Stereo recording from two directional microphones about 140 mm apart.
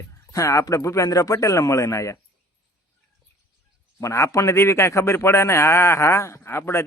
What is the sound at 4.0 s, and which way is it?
Speech, 20° left (ahead or behind).